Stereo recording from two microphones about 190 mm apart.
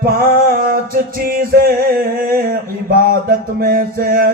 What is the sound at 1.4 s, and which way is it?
Music, 50° right (ahead or behind).